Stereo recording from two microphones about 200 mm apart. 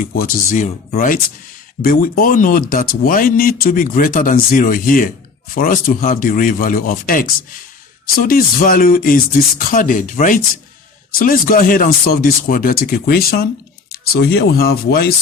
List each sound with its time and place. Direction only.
0.0 s speech: 40° left (ahead or behind)